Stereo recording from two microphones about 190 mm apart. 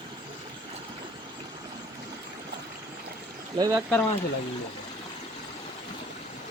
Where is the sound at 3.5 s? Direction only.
20° right (ahead or behind).